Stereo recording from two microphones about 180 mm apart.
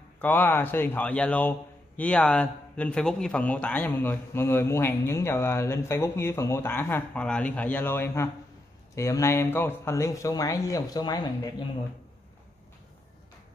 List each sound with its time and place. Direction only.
0.2 s a man's voice: 10° left (ahead or behind)